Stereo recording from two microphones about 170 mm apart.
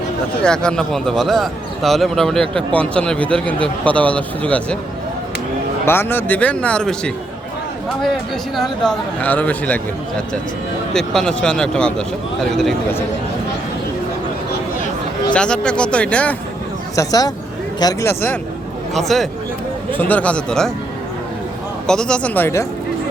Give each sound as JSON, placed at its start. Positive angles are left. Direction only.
{"t": 0.4, "sound": "a man's voice", "side_deg": 5}
{"t": 5.8, "sound": "speech", "side_deg": 15}
{"t": 8.5, "sound": "speech", "side_deg": 5}
{"t": 10.9, "sound": "a man's voice", "side_deg": 5}
{"t": 15.3, "sound": "speech", "side_deg": 5}
{"t": 16.9, "sound": "speech", "side_deg": 20}
{"t": 18.9, "sound": "a man's voice", "side_deg": 0}
{"t": 21.8, "sound": "speech", "side_deg": 5}